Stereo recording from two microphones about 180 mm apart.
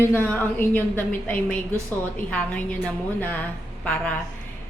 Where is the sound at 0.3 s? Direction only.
10° left (ahead or behind).